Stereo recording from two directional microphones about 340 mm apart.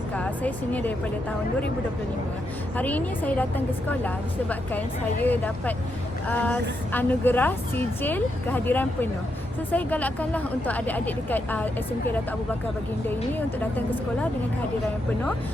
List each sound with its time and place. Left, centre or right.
0.1 s speech: centre
2.7 s speech: centre
13.1 s speech: centre